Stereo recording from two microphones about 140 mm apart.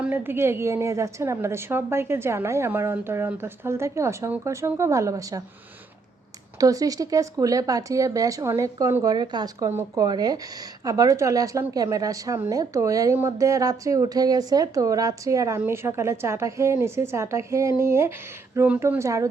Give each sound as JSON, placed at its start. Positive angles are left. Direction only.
{"t": 0.0, "sound": "a woman's voice", "side_deg": -15}
{"t": 6.6, "sound": "a woman's voice", "side_deg": -25}
{"t": 9.0, "sound": "a woman's voice", "side_deg": -30}